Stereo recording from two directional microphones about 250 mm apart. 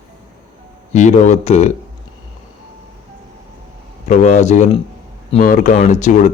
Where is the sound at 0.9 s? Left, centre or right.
Left.